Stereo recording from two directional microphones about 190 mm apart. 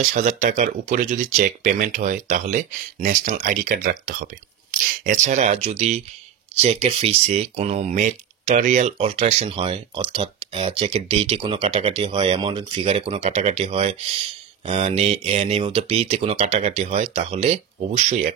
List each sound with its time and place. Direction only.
0.0 s speech: 40° right (ahead or behind)